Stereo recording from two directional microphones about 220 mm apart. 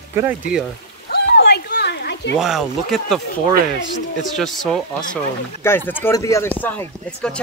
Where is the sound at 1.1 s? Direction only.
50° left (ahead or behind).